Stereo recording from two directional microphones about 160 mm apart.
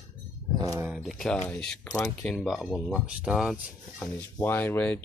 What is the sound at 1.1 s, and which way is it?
Speech, 5° left (ahead or behind).